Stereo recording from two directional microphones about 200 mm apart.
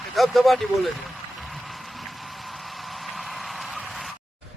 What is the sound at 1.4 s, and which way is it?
Vehicle, centre (ahead or behind).